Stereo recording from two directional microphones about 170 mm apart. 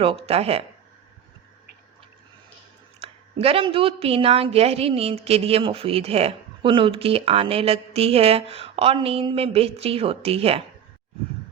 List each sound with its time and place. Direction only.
0.3 s a woman's voice: 35° right (ahead or behind)
3.0 s a woman's voice: 35° right (ahead or behind)